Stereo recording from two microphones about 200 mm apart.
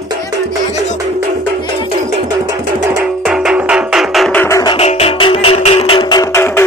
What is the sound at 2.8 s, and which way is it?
Music, 5° right (ahead or behind).